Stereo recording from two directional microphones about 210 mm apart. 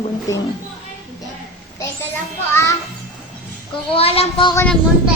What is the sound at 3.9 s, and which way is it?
Speech, 30° left (ahead or behind).